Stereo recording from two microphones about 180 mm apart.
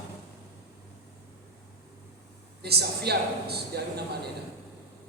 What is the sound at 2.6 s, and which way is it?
A man's voice, 65° right (ahead or behind).